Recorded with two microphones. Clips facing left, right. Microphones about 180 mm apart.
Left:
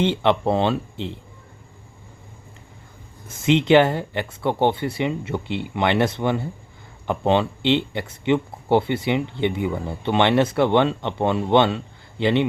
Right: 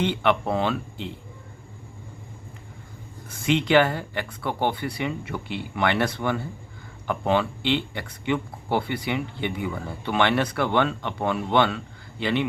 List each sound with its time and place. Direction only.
0.0 s speech: 25° left (ahead or behind)
3.2 s speech: 25° left (ahead or behind)